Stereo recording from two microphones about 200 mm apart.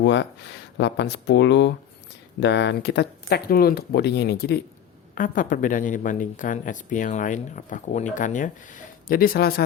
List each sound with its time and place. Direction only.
0.0 s speech: 60° left (ahead or behind)